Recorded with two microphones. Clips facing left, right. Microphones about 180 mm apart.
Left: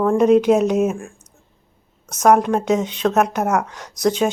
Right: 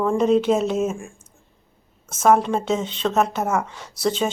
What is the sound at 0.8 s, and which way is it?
Speech, 65° left (ahead or behind).